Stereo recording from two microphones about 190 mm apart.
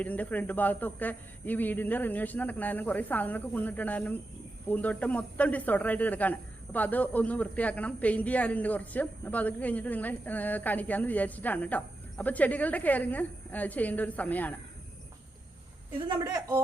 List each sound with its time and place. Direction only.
0.0 s speech: 10° left (ahead or behind)
16.1 s speech: 20° right (ahead or behind)